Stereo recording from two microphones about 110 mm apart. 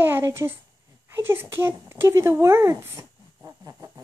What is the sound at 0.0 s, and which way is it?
A child's voice, 20° right (ahead or behind).